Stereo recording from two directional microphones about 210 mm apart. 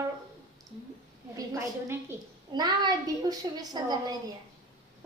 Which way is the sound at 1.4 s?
15° right (ahead or behind).